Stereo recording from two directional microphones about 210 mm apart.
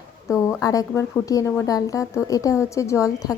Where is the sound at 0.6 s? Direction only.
15° left (ahead or behind).